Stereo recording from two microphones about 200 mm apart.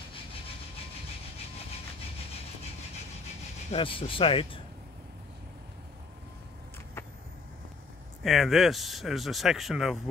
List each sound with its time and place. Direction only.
3.7 s speech: 25° left (ahead or behind)
8.2 s speech: centre (ahead or behind)